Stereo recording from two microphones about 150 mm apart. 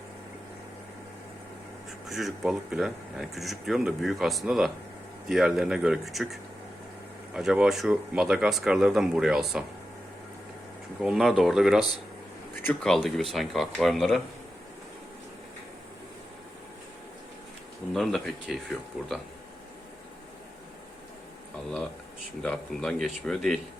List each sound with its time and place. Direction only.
2.0 s speech: centre (ahead or behind)
11.0 s speech: centre (ahead or behind)
17.9 s speech: centre (ahead or behind)
22.4 s speech: 5° left (ahead or behind)